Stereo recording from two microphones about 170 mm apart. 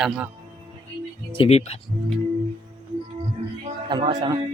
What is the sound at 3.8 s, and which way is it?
Speech, 30° right (ahead or behind).